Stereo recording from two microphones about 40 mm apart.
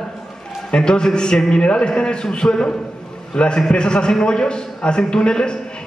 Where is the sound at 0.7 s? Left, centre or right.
Centre.